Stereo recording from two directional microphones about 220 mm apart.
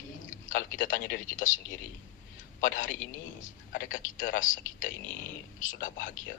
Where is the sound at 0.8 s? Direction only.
40° left (ahead or behind).